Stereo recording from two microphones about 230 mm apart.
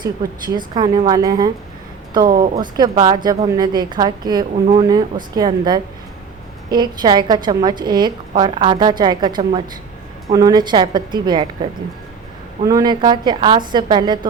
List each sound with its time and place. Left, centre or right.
0.2 s a woman's voice: centre
2.2 s speech: right
2.6 s a woman's voice: centre